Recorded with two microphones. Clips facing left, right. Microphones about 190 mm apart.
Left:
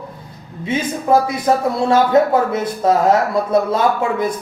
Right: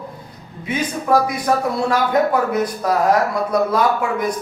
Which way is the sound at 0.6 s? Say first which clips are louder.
Left 2 dB; 25° left (ahead or behind).